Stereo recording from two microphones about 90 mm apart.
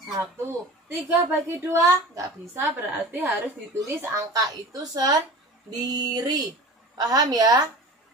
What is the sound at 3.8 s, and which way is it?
Speech, 35° right (ahead or behind).